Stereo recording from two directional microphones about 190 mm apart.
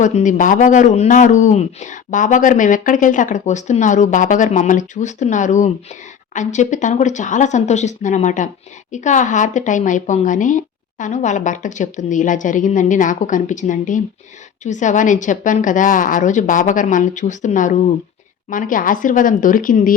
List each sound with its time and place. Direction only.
0.0 s speech: 40° left (ahead or behind)